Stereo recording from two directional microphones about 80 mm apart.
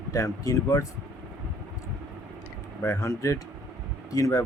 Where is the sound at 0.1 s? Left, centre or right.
Left.